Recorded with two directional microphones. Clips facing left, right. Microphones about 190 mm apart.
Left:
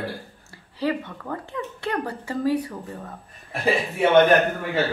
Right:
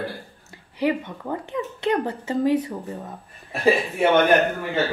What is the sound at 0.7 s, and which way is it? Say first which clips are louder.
Speech: right 2 dB; 20° right (ahead or behind).